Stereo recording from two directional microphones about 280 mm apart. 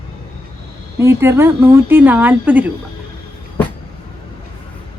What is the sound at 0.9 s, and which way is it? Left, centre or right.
A woman's voice, centre.